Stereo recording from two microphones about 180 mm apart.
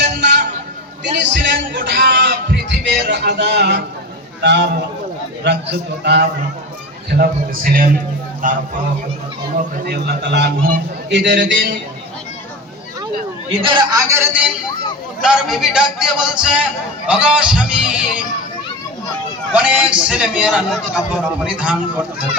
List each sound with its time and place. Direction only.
0.0 s a sound: 70° right (ahead or behind)
1.2 s a man's voice: 80° right
7.1 s a man's voice: 55° right (ahead or behind)
9.8 s a man's voice: 60° right (ahead or behind)
13.5 s a man's voice: 30° right (ahead or behind); by 18.2 s 5° right (ahead or behind)
19.5 s a man's voice: 5° right (ahead or behind)